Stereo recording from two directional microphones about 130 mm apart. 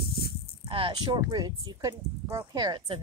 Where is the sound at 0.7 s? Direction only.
45° right (ahead or behind).